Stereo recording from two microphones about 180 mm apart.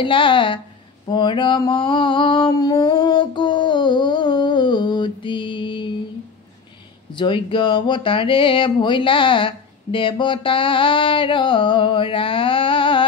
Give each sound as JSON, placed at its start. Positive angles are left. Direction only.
{"t": 0.0, "sound": "speech", "side_deg": 30}
{"t": 1.0, "sound": "mantra", "side_deg": 25}
{"t": 7.2, "sound": "speech", "side_deg": 25}